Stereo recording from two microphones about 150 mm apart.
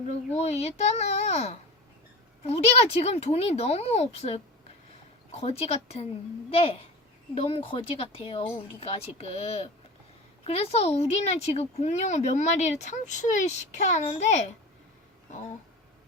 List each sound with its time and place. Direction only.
0.3 s speech: 45° left (ahead or behind)